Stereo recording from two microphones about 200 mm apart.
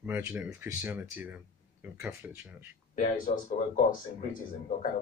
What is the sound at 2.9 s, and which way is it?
Speech, 40° left (ahead or behind).